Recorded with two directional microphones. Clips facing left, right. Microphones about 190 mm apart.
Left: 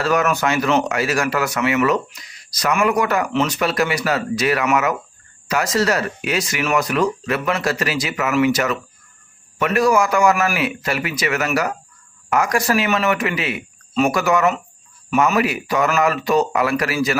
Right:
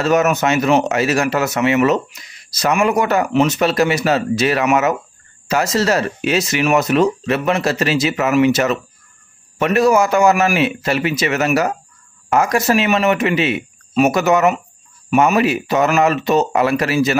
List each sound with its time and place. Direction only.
0.0 s speech: 20° right (ahead or behind)